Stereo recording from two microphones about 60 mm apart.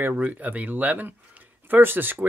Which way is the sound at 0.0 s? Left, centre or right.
Right.